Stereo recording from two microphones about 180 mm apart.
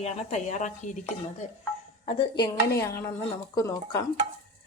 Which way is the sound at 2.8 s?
15° left (ahead or behind).